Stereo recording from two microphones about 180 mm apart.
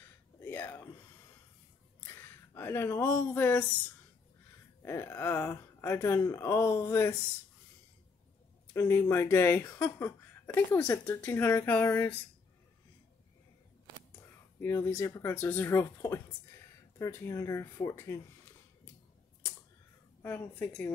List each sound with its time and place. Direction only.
0.4 s a sound: 10° left (ahead or behind)
2.0 s speech: 15° left (ahead or behind)
8.7 s speech: 15° left (ahead or behind)
14.6 s speech: 15° left (ahead or behind)
20.2 s speech: 10° left (ahead or behind)